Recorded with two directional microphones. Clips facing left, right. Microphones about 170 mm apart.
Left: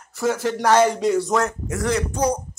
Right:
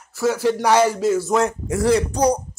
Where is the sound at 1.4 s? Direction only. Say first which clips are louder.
Right 4 dB; 30° right (ahead or behind).